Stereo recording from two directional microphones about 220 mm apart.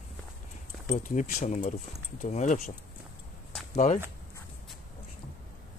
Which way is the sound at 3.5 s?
5° left (ahead or behind).